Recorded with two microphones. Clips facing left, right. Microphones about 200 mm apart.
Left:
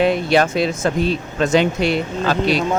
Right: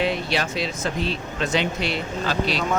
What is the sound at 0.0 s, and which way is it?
Speech, 50° left (ahead or behind).